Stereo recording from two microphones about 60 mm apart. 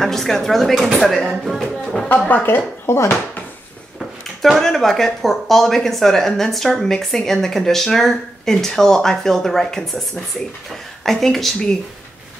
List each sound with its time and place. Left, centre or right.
0.0 s speech: centre
1.6 s a sound: centre
2.0 s speech: left
4.4 s speech: centre